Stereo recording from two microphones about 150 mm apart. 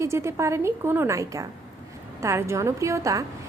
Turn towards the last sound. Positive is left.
turn(degrees=-20)  # may be behind; listen again after turning